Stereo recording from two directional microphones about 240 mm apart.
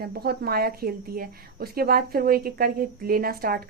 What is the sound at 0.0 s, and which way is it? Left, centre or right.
Speech, right.